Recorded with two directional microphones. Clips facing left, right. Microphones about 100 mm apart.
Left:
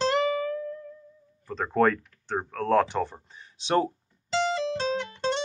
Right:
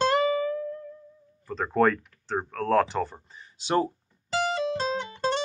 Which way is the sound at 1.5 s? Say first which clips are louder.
Even; centre (ahead or behind).